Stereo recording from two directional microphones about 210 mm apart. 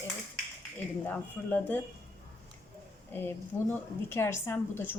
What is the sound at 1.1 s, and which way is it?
Speech, 10° left (ahead or behind).